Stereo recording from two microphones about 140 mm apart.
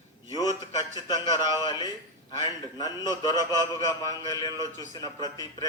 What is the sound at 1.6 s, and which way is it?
A man's voice, 30° left (ahead or behind).